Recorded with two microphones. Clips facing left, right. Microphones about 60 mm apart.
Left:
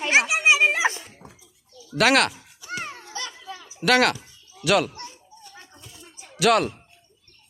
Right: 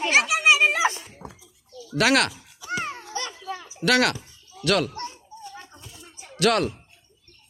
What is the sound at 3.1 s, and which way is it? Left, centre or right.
Children playing, right.